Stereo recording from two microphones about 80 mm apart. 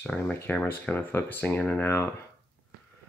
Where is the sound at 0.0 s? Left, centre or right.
Centre.